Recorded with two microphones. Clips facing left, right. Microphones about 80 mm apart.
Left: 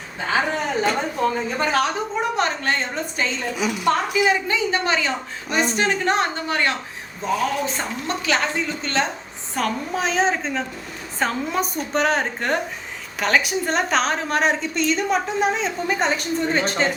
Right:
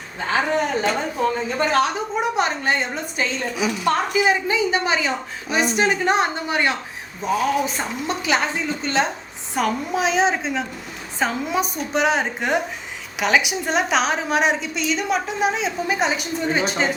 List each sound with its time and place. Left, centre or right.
0.3 s a woman's voice: centre
2.3 s a woman's voice: centre
4.2 s a woman's voice: centre